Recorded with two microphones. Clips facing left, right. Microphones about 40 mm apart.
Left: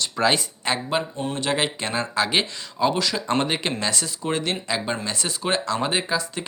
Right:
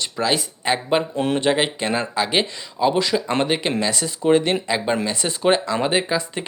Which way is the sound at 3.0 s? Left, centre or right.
Centre.